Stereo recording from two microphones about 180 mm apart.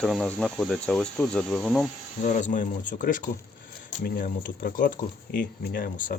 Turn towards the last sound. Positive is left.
turn(degrees=50)  # may be behind; listen again after turning